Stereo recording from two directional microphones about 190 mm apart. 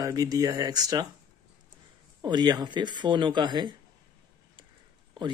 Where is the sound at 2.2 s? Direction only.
20° right (ahead or behind).